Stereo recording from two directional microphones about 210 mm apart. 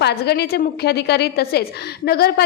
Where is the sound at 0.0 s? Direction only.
50° left (ahead or behind).